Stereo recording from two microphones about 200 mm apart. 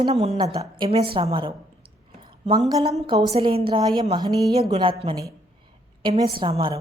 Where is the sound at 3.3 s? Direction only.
25° right (ahead or behind).